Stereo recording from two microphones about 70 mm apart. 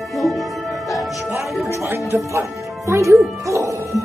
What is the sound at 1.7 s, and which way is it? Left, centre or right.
Music, right.